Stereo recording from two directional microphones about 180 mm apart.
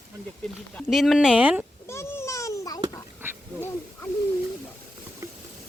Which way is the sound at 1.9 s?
15° left (ahead or behind).